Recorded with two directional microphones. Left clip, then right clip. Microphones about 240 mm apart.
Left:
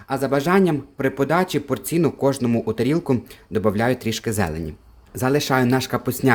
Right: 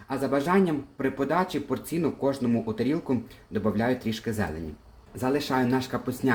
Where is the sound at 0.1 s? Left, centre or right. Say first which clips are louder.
Left 6 dB; left.